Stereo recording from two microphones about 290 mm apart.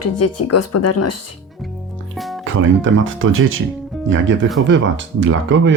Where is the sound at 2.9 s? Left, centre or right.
Right.